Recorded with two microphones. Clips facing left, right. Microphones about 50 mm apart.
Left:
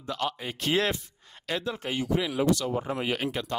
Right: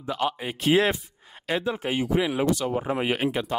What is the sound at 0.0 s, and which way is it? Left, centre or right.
Speech, centre.